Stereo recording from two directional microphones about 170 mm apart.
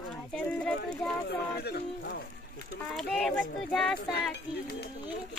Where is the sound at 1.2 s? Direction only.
70° left (ahead or behind).